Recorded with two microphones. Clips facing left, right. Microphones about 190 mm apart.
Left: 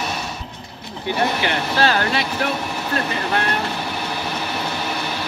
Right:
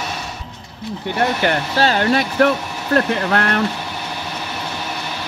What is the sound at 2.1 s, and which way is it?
Speech, 50° right (ahead or behind).